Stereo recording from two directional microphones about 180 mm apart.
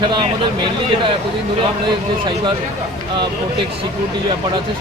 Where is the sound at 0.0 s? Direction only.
25° right (ahead or behind).